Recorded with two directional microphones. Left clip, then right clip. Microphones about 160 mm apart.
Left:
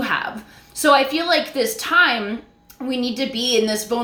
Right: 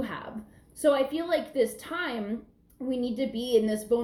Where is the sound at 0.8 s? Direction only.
10° left (ahead or behind).